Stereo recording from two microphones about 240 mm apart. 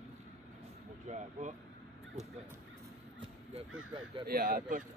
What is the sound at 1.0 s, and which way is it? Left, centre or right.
Speech, right.